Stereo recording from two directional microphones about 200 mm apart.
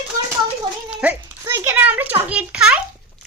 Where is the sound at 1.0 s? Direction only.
10° right (ahead or behind).